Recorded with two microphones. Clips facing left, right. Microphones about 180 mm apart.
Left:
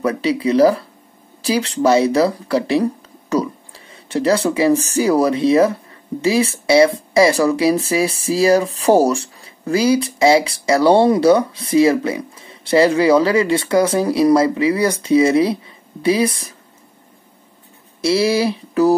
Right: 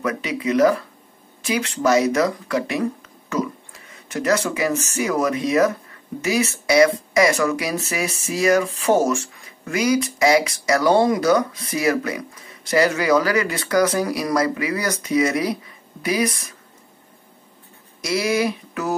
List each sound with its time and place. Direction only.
0.0 s mantra: 30° left (ahead or behind)
1.4 s speech: 35° left (ahead or behind)
18.0 s mantra: 30° left (ahead or behind)